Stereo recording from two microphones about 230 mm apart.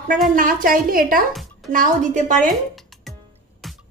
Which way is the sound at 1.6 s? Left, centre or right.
Right.